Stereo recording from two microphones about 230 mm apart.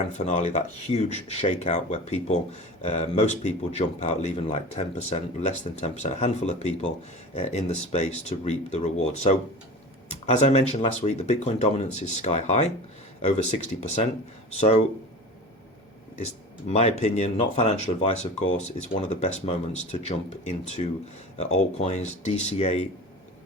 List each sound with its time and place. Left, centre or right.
0.3 s speech: left
16.1 s speech: left